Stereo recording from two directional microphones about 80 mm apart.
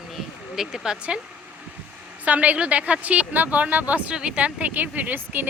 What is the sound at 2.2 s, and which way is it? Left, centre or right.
Speech, centre.